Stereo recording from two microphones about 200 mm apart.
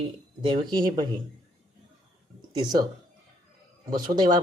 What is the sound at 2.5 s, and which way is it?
Speech, 20° right (ahead or behind).